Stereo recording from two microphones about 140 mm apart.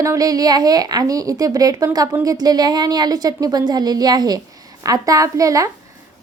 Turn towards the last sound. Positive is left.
turn(degrees=-25)  # may be behind; listen again after turning